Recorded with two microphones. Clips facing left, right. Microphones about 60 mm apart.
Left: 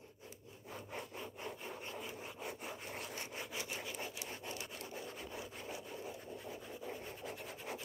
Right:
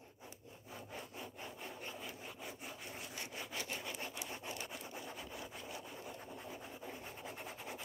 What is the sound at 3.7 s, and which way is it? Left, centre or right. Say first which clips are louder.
Wood: even; centre.